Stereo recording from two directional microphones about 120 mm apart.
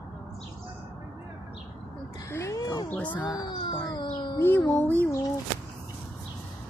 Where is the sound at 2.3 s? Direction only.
25° left (ahead or behind).